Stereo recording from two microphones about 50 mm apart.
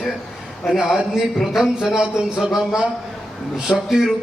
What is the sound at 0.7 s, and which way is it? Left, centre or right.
A man's voice, centre.